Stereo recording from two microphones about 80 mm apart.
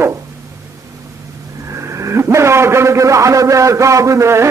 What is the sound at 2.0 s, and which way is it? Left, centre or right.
A man's voice, right.